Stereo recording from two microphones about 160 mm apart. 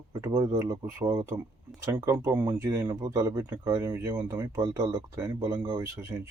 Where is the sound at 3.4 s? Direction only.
10° right (ahead or behind).